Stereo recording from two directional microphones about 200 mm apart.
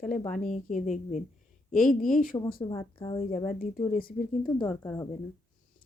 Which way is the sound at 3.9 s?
45° left (ahead or behind).